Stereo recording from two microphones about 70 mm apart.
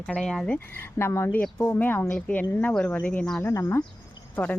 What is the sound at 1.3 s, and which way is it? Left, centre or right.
A woman's voice, left.